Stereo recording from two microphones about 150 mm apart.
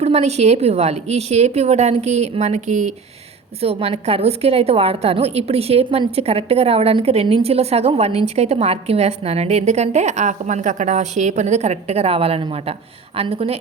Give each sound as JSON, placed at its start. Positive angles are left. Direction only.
{"t": 0.0, "sound": "a woman's voice", "side_deg": -45}
{"t": 3.6, "sound": "a woman's voice", "side_deg": -40}